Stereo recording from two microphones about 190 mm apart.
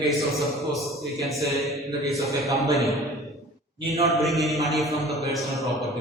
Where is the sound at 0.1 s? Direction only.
Centre (ahead or behind).